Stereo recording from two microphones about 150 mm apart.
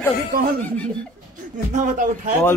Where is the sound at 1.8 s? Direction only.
55° right (ahead or behind).